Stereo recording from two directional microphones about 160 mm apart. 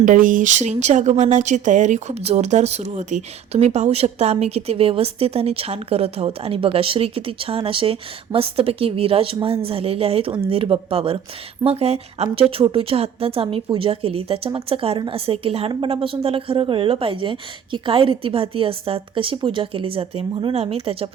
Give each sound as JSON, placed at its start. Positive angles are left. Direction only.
{"t": 0.0, "sound": "speech", "side_deg": -55}